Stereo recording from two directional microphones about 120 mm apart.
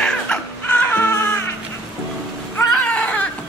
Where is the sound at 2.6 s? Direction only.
10° left (ahead or behind).